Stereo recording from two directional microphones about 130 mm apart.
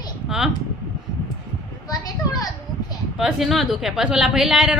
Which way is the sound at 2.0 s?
30° left (ahead or behind).